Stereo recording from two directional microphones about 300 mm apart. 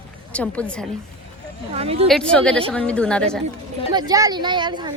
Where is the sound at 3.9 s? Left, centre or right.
Centre.